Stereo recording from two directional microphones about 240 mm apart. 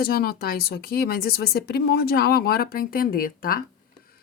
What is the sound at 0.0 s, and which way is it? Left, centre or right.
A woman's voice, left.